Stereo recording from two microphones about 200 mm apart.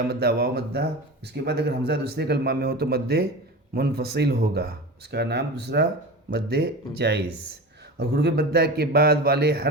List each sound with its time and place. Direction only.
0.1 s speech: 50° right (ahead or behind)